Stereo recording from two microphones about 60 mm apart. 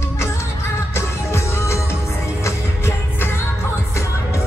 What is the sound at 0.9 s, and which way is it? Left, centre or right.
Music, left.